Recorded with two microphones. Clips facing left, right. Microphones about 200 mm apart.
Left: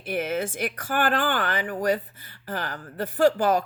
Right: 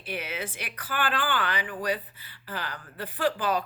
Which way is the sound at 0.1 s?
50° left (ahead or behind).